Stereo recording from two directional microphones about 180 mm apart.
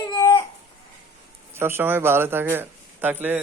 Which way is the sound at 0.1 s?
15° left (ahead or behind).